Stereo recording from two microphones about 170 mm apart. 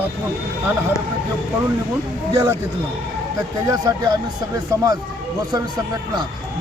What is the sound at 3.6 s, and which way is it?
Speech, 25° right (ahead or behind).